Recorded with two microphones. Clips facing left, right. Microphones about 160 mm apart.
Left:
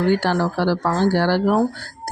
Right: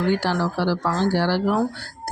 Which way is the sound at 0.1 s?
55° left (ahead or behind).